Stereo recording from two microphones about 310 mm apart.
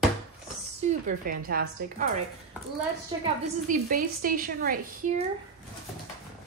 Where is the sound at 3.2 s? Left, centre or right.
Right.